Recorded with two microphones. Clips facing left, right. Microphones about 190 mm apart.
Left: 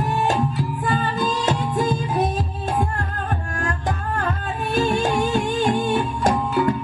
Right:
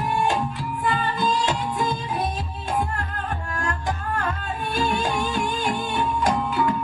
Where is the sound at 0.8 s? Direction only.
45° left (ahead or behind).